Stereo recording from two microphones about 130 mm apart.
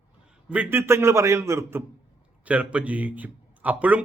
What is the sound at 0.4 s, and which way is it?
A man's voice, 10° right (ahead or behind).